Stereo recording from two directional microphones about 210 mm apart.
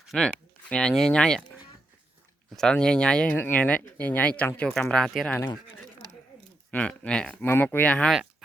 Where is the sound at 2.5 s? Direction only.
5° left (ahead or behind).